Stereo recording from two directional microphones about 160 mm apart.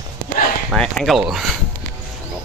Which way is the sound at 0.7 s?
5° left (ahead or behind).